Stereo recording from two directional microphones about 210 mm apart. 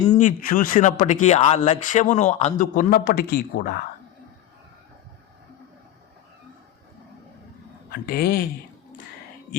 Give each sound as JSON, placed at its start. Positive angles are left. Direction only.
{"t": 0.1, "sound": "speech", "side_deg": 35}
{"t": 7.9, "sound": "speech", "side_deg": 45}